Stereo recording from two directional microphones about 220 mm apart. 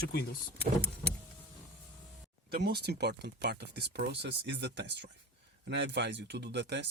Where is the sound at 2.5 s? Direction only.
45° right (ahead or behind).